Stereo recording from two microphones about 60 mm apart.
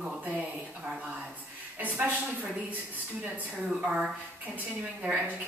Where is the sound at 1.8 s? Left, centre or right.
Right.